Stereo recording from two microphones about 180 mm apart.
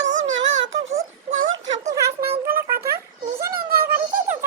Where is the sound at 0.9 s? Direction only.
45° right (ahead or behind).